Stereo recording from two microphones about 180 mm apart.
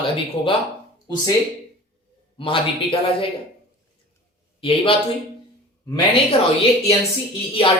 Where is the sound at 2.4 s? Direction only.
30° left (ahead or behind).